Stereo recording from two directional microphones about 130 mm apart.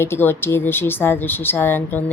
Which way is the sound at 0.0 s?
15° left (ahead or behind).